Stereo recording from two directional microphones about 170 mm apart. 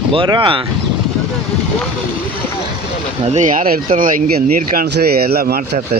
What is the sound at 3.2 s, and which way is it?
Speech, 45° right (ahead or behind).